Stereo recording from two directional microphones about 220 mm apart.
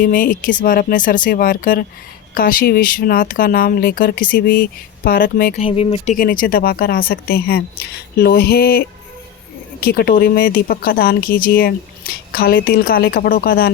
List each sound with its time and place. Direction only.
0.0 s speech: 40° left (ahead or behind)
5.6 s speech: 25° left (ahead or behind)
6.1 s speech: 40° left (ahead or behind)
9.8 s speech: 45° left (ahead or behind)